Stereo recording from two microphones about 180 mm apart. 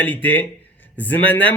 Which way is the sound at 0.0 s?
10° left (ahead or behind).